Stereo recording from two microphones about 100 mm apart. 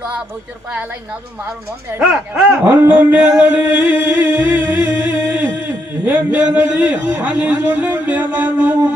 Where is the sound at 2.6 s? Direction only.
15° right (ahead or behind).